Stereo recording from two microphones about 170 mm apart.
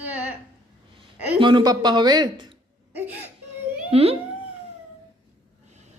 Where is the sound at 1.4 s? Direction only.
25° right (ahead or behind).